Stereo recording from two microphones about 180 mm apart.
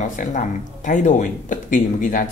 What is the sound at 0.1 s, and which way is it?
Speech, 45° left (ahead or behind).